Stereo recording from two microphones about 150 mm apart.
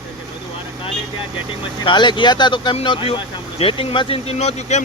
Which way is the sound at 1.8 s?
30° left (ahead or behind).